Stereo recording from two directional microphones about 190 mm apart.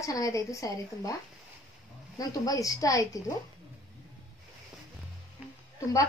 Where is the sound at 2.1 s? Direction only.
20° left (ahead or behind).